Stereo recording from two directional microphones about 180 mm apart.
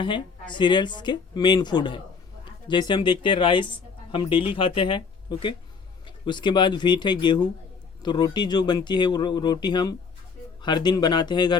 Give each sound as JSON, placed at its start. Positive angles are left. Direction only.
{"t": 0.0, "sound": "speech", "side_deg": 25}